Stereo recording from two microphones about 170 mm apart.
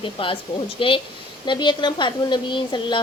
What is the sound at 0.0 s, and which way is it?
A woman's voice, 30° left (ahead or behind).